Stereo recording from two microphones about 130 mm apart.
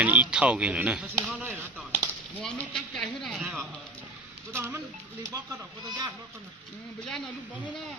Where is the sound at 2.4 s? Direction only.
5° left (ahead or behind).